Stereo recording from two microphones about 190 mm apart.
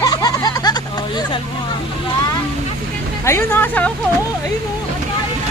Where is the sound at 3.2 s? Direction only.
15° left (ahead or behind).